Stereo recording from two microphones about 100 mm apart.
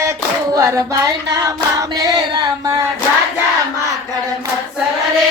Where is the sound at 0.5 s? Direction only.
30° right (ahead or behind).